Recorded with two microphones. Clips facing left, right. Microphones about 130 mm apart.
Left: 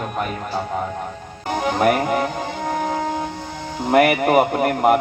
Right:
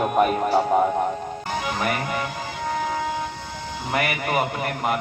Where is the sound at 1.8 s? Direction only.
45° left (ahead or behind).